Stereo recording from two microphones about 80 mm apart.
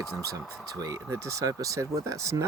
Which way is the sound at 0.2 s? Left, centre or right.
Right.